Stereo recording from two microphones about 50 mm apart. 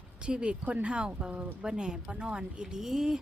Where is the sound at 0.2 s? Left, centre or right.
Right.